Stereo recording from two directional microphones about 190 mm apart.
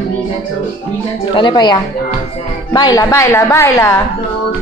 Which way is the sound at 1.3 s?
25° left (ahead or behind).